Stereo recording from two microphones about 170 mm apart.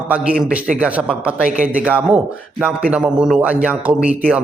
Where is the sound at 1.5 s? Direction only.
50° right (ahead or behind).